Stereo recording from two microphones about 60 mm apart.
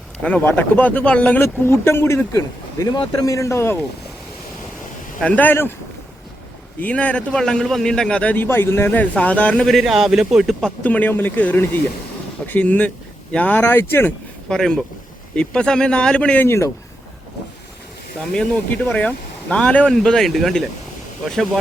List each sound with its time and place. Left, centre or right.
0.2 s speech: centre
1.4 s speech: left
2.3 s speech: left
5.2 s speech: left
6.8 s speech: left
8.4 s speech: left
8.9 s speech: left
9.8 s speech: centre
10.8 s speech: left
11.1 s speech: left
14.5 s speech: centre
18.7 s speech: left
19.9 s speech: centre